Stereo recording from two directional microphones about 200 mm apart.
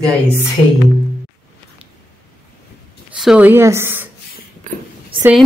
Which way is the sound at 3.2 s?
5° right (ahead or behind).